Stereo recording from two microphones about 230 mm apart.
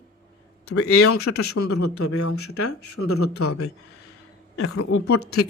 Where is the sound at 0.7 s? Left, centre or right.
Left.